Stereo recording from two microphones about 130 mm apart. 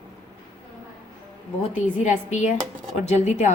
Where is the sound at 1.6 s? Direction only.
65° left (ahead or behind).